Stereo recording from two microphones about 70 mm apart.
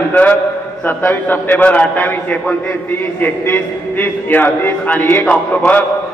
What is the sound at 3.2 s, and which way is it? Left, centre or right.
A man's voice, left.